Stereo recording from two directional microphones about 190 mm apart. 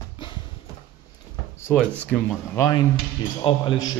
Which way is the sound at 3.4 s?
25° left (ahead or behind).